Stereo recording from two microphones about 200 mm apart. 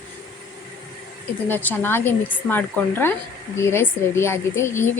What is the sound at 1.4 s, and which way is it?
A woman's voice, 10° left (ahead or behind).